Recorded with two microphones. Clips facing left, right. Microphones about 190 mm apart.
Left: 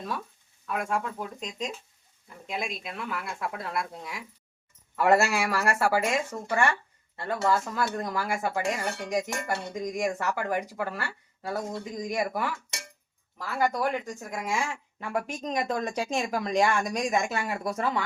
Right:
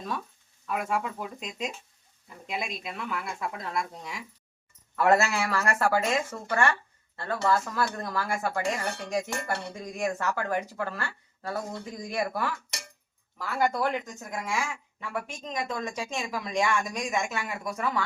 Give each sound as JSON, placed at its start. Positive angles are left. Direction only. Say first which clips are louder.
{"t": 0.7, "sound": "speech", "louder": "even", "side_deg": -5}
{"t": 13.6, "sound": "speech", "louder": "even", "side_deg": 10}
{"t": 15.4, "sound": "speech", "louder": "left 4 dB", "side_deg": 40}